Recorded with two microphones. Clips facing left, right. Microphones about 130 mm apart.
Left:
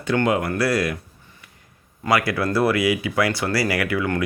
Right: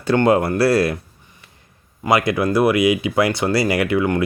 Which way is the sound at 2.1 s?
20° right (ahead or behind).